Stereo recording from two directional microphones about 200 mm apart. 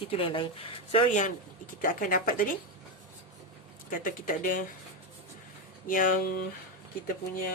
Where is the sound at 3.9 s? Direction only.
45° left (ahead or behind).